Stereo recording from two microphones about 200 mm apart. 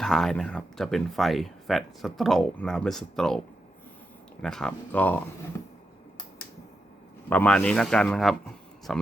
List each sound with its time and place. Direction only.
0.0 s speech: centre (ahead or behind)
4.4 s speech: 5° left (ahead or behind)
7.3 s speech: 5° left (ahead or behind)